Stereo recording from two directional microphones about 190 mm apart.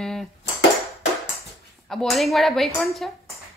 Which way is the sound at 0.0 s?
Centre (ahead or behind).